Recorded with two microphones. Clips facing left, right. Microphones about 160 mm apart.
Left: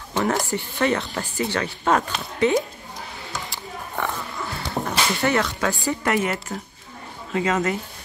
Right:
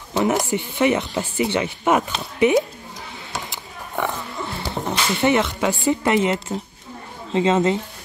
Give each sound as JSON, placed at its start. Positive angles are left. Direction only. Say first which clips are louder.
{"t": 0.1, "sound": "speech", "louder": "right 3 dB", "side_deg": -20}
{"t": 3.4, "sound": "a sound", "louder": "left 1 dB", "side_deg": -20}
{"t": 4.6, "sound": "speech", "louder": "even", "side_deg": -20}